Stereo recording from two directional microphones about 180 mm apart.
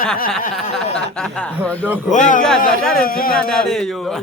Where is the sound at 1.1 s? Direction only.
5° left (ahead or behind).